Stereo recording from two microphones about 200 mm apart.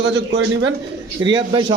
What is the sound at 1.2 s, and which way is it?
Speech, 20° right (ahead or behind).